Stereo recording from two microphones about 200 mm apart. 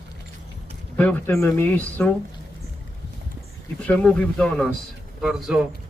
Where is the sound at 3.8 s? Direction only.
5° left (ahead or behind).